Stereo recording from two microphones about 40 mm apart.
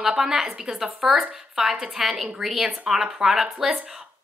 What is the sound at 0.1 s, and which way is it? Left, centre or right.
Speech, centre.